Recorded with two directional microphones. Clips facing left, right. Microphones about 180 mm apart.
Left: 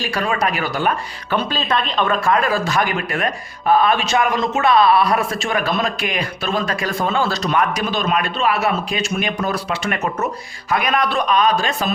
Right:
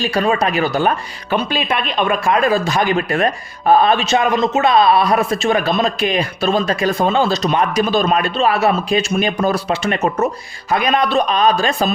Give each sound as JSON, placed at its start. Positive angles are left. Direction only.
{"t": 0.1, "sound": "a man's voice", "side_deg": -25}
{"t": 1.3, "sound": "a man's voice", "side_deg": -15}